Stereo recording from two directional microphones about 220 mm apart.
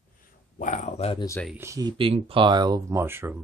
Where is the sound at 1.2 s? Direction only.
10° left (ahead or behind).